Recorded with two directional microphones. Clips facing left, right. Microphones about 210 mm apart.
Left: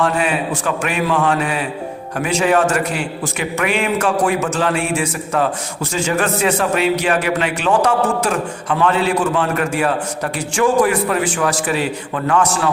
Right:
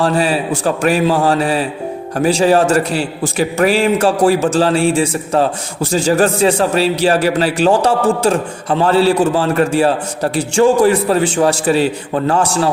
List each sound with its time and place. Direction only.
0.0 s a man's voice: 30° right (ahead or behind)